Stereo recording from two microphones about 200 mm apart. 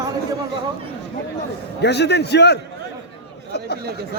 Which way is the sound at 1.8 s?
55° left (ahead or behind).